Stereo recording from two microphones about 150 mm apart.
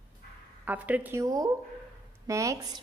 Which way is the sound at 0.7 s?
10° right (ahead or behind).